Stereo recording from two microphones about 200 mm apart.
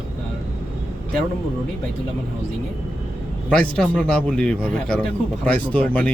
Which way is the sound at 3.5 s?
5° left (ahead or behind).